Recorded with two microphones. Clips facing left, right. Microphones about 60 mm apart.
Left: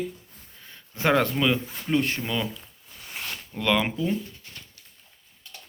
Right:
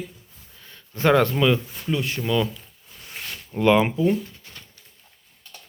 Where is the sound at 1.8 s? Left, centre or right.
Left.